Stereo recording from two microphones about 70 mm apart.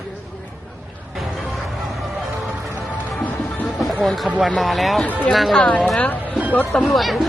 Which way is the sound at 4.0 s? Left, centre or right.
Centre.